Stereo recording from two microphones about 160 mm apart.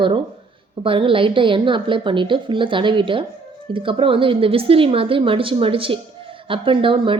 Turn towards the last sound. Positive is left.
turn(degrees=-30)  # may be behind; listen again after turning